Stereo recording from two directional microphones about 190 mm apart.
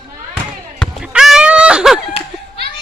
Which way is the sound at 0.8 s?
Centre (ahead or behind).